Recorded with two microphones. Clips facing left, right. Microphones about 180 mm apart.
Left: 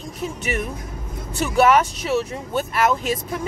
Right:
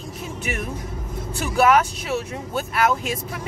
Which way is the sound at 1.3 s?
Centre (ahead or behind).